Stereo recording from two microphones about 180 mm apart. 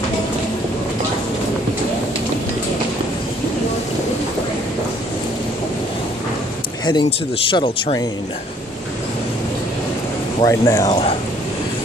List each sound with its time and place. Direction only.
6.9 s speech: 25° left (ahead or behind)
10.4 s speech: 20° left (ahead or behind)